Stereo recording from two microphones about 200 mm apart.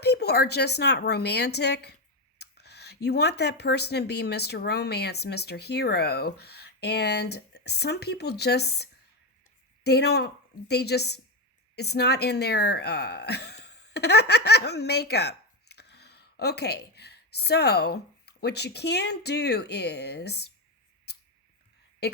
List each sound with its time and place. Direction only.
0.0 s speech: 55° left (ahead or behind)